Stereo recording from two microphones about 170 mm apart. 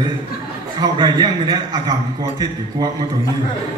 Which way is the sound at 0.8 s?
25° right (ahead or behind).